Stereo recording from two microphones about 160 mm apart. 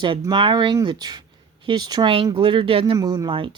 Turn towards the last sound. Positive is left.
turn(degrees=-30)  # may be behind; listen again after turning